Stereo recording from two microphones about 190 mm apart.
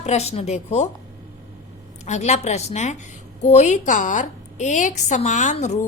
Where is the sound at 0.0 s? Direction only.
35° left (ahead or behind).